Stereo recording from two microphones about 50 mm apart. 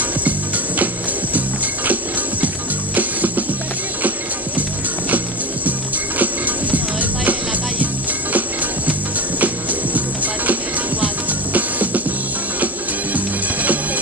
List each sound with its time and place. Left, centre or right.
2.4 s music: right
5.7 s music: right
13.1 s music: right